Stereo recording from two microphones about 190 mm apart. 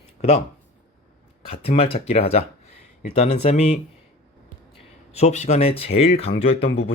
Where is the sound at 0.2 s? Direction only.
35° left (ahead or behind).